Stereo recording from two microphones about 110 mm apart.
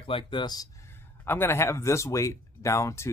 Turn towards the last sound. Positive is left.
turn(degrees=25)  # may be behind; listen again after turning